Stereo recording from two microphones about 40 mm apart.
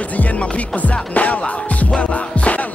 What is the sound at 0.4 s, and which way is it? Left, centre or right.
Music, left.